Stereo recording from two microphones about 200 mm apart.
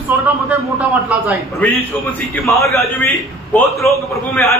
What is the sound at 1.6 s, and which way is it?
Speech, 10° left (ahead or behind).